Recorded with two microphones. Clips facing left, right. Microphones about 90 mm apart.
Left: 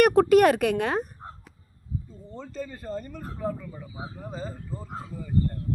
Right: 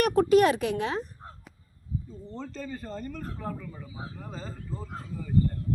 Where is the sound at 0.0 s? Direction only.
60° left (ahead or behind).